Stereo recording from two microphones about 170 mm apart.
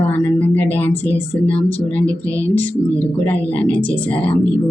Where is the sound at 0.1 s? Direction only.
10° left (ahead or behind).